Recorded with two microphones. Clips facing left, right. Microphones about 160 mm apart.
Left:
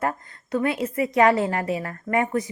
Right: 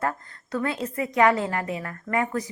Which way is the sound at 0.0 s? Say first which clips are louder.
Left 2 dB; 20° left (ahead or behind).